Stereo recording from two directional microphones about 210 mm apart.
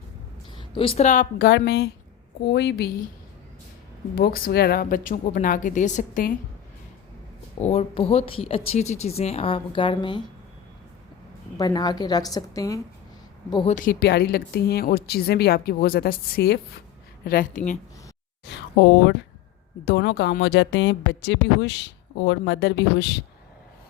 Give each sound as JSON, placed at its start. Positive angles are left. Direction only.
{"t": 0.8, "sound": "a woman's voice", "side_deg": 30}
{"t": 4.1, "sound": "a woman's voice", "side_deg": 45}
{"t": 7.6, "sound": "speech", "side_deg": 30}
{"t": 11.5, "sound": "speech", "side_deg": 20}
{"t": 13.7, "sound": "a woman's voice", "side_deg": 45}
{"t": 18.4, "sound": "a woman's voice", "side_deg": 55}